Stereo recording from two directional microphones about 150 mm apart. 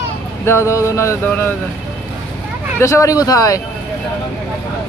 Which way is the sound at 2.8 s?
20° left (ahead or behind).